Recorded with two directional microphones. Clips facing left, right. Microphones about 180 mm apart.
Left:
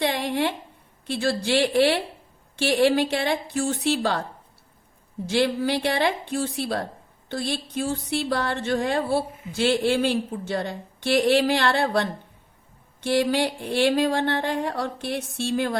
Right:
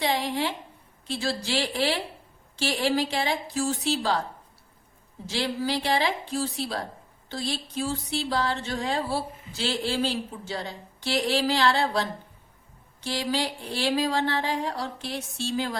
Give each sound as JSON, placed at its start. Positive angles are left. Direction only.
{"t": 0.0, "sound": "a sound", "side_deg": 60}
{"t": 1.0, "sound": "speech", "side_deg": 60}
{"t": 5.3, "sound": "speech", "side_deg": 60}